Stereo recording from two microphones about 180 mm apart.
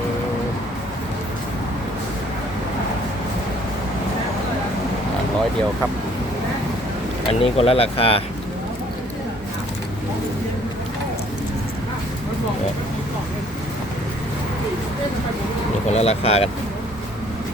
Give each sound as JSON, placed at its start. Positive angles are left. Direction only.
{"t": 7.3, "sound": "speech", "side_deg": 35}
{"t": 15.9, "sound": "speech", "side_deg": 35}